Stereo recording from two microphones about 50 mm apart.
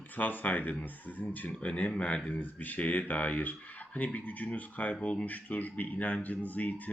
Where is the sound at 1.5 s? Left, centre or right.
Left.